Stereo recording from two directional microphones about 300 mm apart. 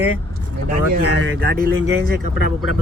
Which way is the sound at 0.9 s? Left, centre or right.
Right.